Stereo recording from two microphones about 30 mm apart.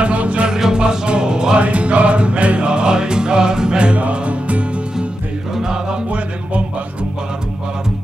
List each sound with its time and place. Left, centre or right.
0.0 s music: right
0.7 s music: right
1.6 s music: right
4.0 s music: right
5.6 s music: right
6.0 s music: right